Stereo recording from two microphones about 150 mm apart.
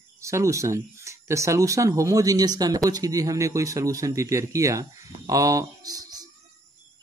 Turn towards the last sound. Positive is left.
turn(degrees=-25)  # may be behind; listen again after turning